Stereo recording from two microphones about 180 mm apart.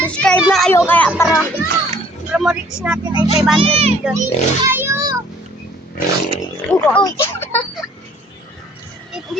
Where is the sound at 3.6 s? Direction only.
35° right (ahead or behind).